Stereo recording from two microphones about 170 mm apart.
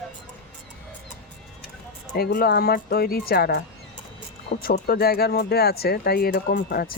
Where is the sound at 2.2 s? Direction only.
60° left (ahead or behind).